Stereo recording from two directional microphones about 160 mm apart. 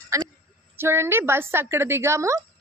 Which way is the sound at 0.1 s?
20° right (ahead or behind).